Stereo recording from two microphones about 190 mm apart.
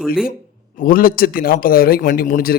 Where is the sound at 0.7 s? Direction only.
50° left (ahead or behind).